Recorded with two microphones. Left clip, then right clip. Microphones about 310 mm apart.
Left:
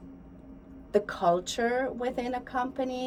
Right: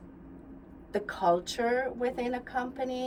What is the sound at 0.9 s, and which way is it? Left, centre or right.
Speech, centre.